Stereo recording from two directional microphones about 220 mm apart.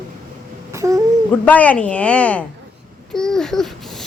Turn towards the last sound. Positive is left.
turn(degrees=0)  # may be behind; listen again after turning